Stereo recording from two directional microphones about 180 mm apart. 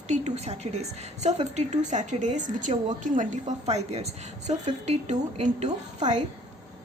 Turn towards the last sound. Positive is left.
turn(degrees=-40)  # may be behind; listen again after turning